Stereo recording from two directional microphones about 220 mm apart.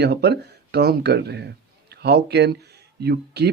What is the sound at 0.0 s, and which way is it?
Speech, 50° right (ahead or behind).